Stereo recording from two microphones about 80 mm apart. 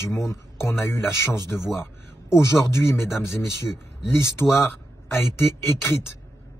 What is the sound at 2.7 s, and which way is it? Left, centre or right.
A man's voice, left.